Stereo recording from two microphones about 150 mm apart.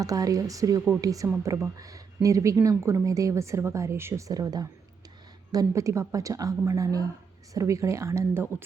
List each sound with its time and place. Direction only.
0.0 s a woman's voice: 25° right (ahead or behind)